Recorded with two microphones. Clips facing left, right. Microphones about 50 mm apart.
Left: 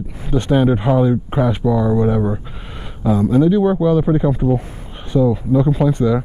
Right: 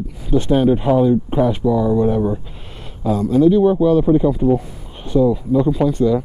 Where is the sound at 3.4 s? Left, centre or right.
Centre.